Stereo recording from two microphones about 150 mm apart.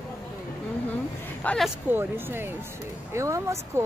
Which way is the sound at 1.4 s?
5° left (ahead or behind).